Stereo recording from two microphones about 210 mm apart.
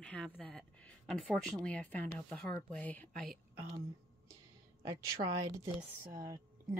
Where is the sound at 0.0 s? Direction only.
5° left (ahead or behind).